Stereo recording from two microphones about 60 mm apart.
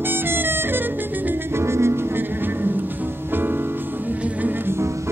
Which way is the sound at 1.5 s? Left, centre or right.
Right.